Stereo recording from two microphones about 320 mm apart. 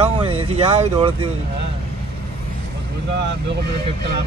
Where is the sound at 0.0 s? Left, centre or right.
Centre.